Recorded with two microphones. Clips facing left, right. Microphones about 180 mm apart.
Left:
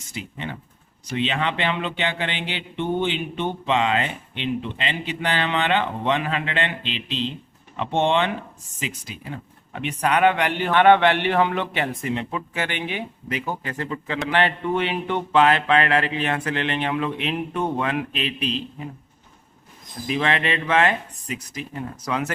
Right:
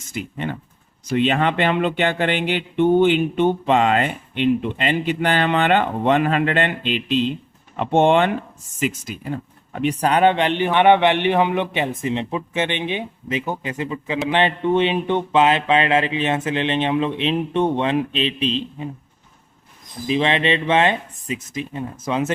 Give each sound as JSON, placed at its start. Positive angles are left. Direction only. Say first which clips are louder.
{"t": 0.1, "sound": "speech", "louder": "right 6 dB", "side_deg": -50}
{"t": 20.1, "sound": "speech", "louder": "right 4 dB", "side_deg": -20}